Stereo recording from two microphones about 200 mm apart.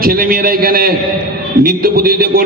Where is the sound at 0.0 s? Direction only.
45° right (ahead or behind).